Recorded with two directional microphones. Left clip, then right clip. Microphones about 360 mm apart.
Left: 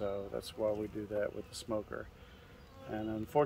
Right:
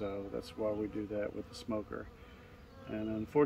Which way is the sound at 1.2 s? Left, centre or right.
Centre.